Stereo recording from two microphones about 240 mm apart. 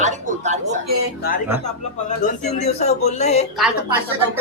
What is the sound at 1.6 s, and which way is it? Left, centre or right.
Speech, left.